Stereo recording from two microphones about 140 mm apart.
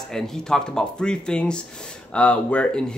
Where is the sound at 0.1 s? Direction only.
5° left (ahead or behind).